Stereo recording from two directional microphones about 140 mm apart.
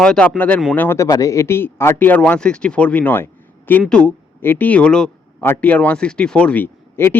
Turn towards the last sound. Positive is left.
turn(degrees=15)  # may be behind; listen again after turning